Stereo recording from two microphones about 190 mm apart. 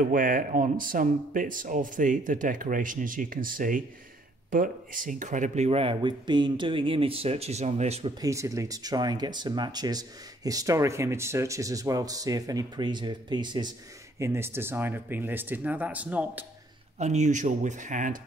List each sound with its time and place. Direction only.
0.0 s speech: 45° right (ahead or behind)
8.2 s speech: 15° right (ahead or behind)
17.0 s speech: 35° right (ahead or behind)